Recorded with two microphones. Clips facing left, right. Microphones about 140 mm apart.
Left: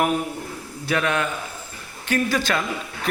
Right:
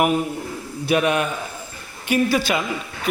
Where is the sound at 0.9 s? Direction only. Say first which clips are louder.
Right 4 dB; 15° right (ahead or behind).